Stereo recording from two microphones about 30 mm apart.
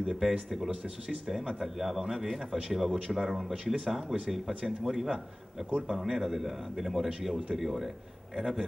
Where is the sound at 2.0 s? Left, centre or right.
Right.